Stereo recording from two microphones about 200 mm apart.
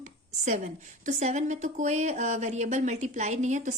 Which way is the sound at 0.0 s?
35° right (ahead or behind).